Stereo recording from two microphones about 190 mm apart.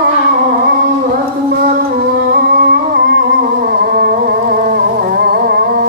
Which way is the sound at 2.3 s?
55° right (ahead or behind).